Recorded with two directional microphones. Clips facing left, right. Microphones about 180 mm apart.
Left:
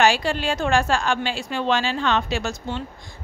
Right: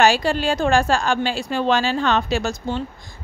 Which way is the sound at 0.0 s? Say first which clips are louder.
Right 3 dB; 40° right (ahead or behind).